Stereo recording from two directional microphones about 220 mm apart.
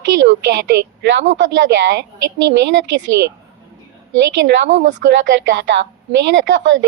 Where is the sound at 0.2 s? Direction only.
55° right (ahead or behind).